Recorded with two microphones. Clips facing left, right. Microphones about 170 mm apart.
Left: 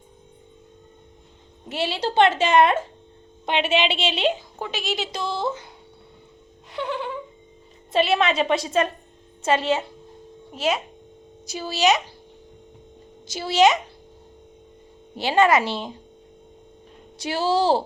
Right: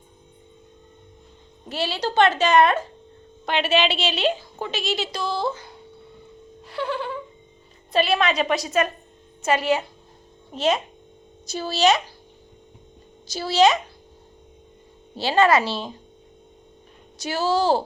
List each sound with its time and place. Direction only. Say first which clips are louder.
1.7 s speech: left 1 dB; 25° left (ahead or behind)
6.7 s a sound: right 1 dB; 20° left (ahead or behind)
7.9 s speech: left 1 dB; 25° left (ahead or behind)
10.5 s speech: right 2 dB; 10° left (ahead or behind)
13.3 s speech: even; 20° left (ahead or behind)
15.1 s speech: even; 20° left (ahead or behind)
17.2 s speech: even; 30° left (ahead or behind)